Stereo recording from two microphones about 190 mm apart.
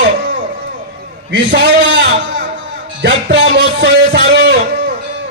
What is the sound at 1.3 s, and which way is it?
Speech, 65° right (ahead or behind).